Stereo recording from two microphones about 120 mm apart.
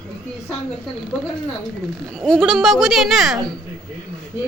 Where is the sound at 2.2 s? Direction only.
Centre (ahead or behind).